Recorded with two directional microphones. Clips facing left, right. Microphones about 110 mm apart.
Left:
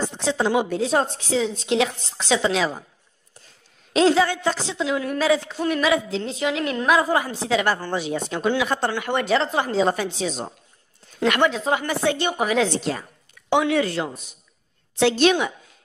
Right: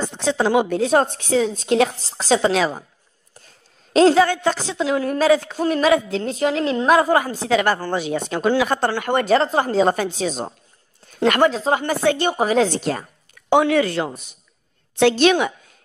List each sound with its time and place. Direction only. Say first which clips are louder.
0.2 s a woman's voice: right 4 dB; 60° right (ahead or behind)
3.9 s a woman's voice: right 4 dB; 45° right (ahead or behind)
6.6 s a woman's voice: right 4 dB; 30° right (ahead or behind)
7.0 s a woman's voice: right 4 dB; 60° right (ahead or behind)
8.5 s a woman's voice: right 4 dB; 45° right (ahead or behind)
12.0 s speech: right 4 dB; 55° right (ahead or behind)
12.3 s speech: right 3 dB; 35° right (ahead or behind)
13.7 s speech: right 3 dB; 60° right (ahead or behind)